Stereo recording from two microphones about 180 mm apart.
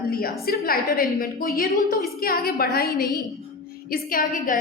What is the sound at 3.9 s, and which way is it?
Speech, 55° left (ahead or behind).